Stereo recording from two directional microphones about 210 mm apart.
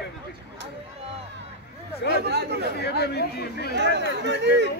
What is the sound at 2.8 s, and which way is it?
Speech, 50° left (ahead or behind).